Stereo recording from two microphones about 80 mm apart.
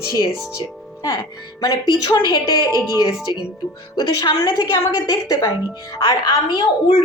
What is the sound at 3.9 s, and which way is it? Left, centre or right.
A woman's voice, left.